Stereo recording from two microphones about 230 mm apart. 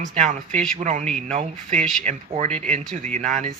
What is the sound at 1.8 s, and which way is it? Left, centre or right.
Speech, centre.